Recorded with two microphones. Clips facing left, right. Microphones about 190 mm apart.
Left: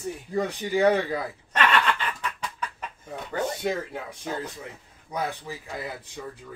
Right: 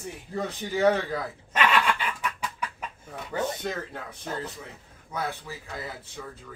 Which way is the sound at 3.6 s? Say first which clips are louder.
Left 4 dB; 10° left (ahead or behind).